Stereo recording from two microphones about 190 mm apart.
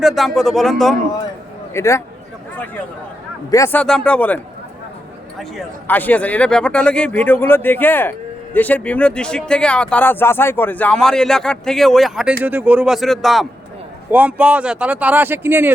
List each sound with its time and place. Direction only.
0.0 s speech: centre (ahead or behind)
1.7 s speech: 15° left (ahead or behind)
3.5 s speech: 10° left (ahead or behind)
5.4 s speech: 5° left (ahead or behind); by 15.7 s 10° right (ahead or behind)